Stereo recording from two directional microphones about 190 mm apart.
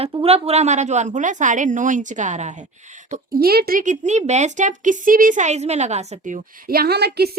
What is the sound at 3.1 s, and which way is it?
A child's voice, 55° right (ahead or behind).